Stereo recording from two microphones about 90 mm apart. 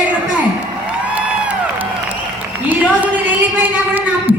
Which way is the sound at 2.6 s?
20° right (ahead or behind).